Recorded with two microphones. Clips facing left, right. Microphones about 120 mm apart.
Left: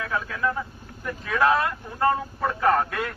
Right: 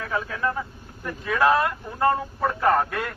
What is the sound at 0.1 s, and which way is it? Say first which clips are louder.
Speech: right 2 dB; 5° right (ahead or behind).